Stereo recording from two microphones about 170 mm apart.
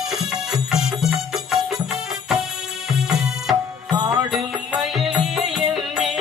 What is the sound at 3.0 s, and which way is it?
Music, 5° right (ahead or behind).